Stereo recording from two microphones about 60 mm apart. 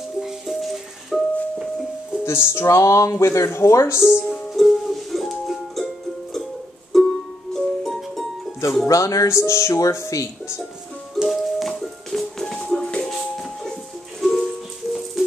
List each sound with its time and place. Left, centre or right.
0.2 s music: centre
2.2 s speech: left
4.3 s music: centre
6.9 s music: centre
8.8 s speech: left
11.2 s music: centre